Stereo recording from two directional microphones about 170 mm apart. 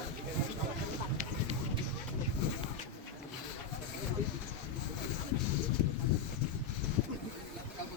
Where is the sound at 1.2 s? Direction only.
55° right (ahead or behind).